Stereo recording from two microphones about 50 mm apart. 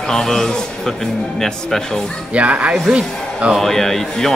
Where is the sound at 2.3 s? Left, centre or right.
Right.